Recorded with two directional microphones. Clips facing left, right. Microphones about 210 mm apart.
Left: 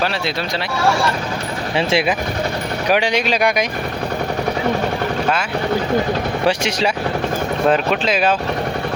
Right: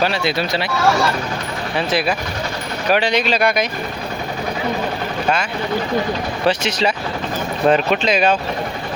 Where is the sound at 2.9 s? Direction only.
10° left (ahead or behind).